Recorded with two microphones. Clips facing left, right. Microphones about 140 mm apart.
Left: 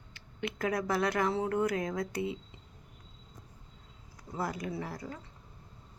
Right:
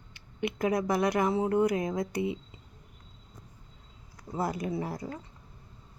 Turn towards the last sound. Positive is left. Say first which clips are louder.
# right 5 dB
turn(degrees=-25)  # may be behind; listen again after turning